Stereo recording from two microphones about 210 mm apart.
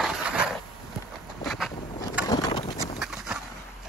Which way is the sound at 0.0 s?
5° right (ahead or behind).